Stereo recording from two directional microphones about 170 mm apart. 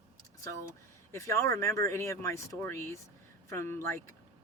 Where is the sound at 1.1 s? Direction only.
15° left (ahead or behind).